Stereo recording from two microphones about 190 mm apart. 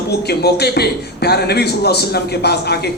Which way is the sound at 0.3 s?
60° left (ahead or behind).